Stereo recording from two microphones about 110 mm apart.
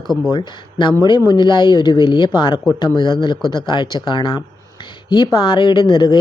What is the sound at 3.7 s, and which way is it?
Speech, 45° left (ahead or behind).